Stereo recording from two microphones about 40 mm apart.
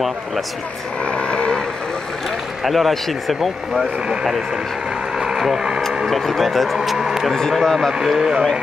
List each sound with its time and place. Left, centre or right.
1.1 s cattle: left
2.6 s speech: centre
5.4 s speech: centre
6.0 s speech: centre
7.6 s a man's voice: centre
8.2 s speech: centre